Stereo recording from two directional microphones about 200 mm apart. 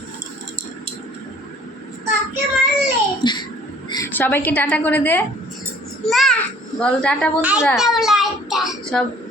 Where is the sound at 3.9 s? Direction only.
10° left (ahead or behind).